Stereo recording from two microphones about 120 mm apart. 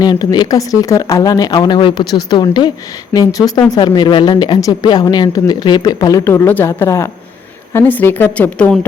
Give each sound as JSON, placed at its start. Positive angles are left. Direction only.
{"t": 0.0, "sound": "speech", "side_deg": 35}
{"t": 6.2, "sound": "speech", "side_deg": 20}